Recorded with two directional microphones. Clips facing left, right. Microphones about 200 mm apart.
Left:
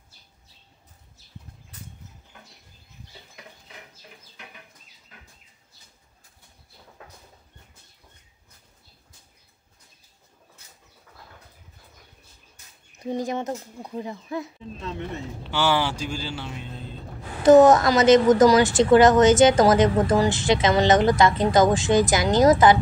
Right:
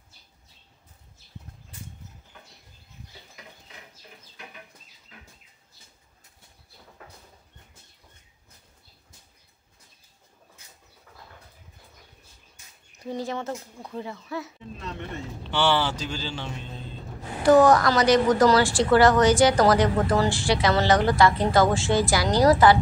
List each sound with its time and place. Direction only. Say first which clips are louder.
13.0 s a man's voice: left 3 dB; 15° left (ahead or behind)
15.5 s a man's voice: even; 10° left (ahead or behind)
17.4 s a woman's voice: left 3 dB; 20° left (ahead or behind)